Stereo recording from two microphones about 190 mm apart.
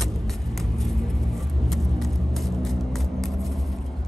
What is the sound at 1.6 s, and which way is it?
Vehicle, centre (ahead or behind).